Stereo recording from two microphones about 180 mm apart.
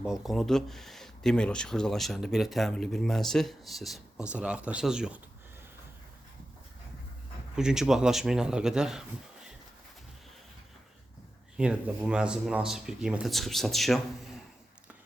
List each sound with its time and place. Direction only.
0.0 s speech: 5° right (ahead or behind)
7.5 s speech: 5° right (ahead or behind)
11.5 s speech: 5° right (ahead or behind)